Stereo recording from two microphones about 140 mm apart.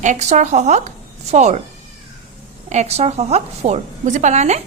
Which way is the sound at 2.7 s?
50° right (ahead or behind).